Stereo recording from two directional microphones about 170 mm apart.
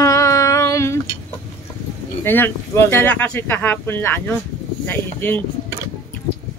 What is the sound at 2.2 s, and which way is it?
Speech, 15° left (ahead or behind).